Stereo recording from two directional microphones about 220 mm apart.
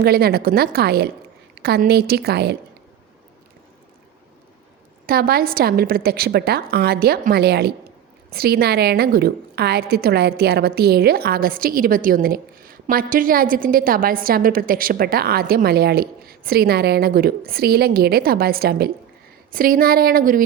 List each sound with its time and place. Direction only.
0.0 s a woman's voice: 45° right (ahead or behind)
5.0 s a woman's voice: 45° right (ahead or behind)